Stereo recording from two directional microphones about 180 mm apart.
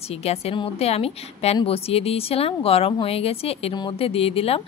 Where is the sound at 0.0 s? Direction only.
35° left (ahead or behind).